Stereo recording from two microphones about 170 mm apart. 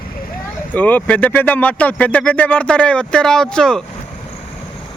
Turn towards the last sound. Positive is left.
turn(degrees=5)  # may be behind; listen again after turning